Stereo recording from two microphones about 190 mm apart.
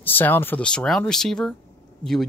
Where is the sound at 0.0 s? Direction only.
10° left (ahead or behind).